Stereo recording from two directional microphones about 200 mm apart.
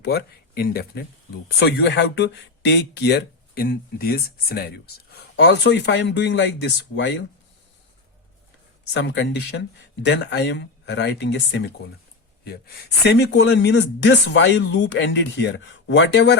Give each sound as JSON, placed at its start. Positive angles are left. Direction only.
{"t": 0.0, "sound": "speech", "side_deg": 50}
{"t": 8.9, "sound": "speech", "side_deg": 60}